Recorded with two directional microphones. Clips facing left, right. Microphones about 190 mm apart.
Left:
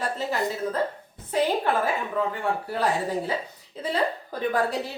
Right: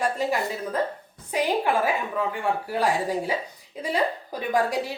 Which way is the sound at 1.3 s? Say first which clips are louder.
Even; 10° right (ahead or behind).